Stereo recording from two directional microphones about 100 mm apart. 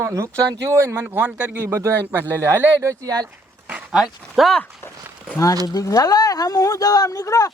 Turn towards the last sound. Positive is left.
turn(degrees=35)  # may be behind; listen again after turning